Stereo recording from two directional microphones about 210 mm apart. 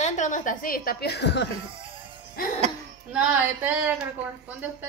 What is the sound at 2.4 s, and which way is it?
Music, 45° left (ahead or behind).